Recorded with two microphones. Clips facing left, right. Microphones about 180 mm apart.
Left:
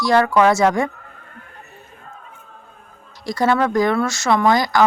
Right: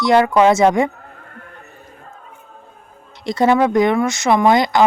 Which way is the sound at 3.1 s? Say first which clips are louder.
Right 3 dB; 25° right (ahead or behind).